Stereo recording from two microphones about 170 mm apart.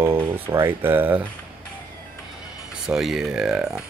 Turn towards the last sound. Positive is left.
turn(degrees=-5)  # may be behind; listen again after turning